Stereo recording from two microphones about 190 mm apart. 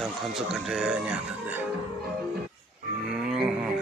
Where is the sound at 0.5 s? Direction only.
5° right (ahead or behind).